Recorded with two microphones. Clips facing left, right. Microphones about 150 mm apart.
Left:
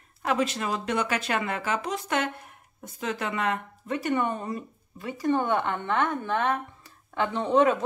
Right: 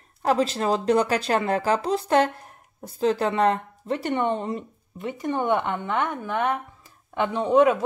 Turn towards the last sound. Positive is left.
turn(degrees=-10)  # may be behind; listen again after turning